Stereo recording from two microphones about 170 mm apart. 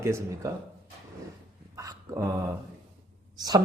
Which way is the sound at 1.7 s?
20° right (ahead or behind).